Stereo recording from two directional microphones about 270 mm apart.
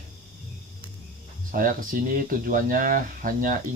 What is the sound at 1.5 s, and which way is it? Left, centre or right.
Speech, right.